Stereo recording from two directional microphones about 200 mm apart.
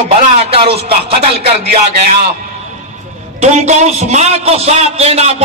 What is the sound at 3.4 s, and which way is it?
A man's voice, 35° right (ahead or behind).